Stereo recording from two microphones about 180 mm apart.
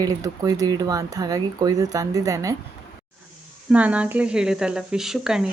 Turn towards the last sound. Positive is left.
turn(degrees=-5)  # may be behind; listen again after turning